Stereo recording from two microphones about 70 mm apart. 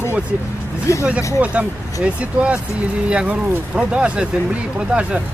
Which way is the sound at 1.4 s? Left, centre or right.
Centre.